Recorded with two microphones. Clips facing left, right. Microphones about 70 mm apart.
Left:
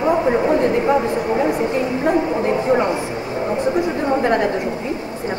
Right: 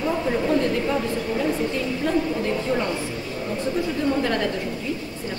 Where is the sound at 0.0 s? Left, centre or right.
Left.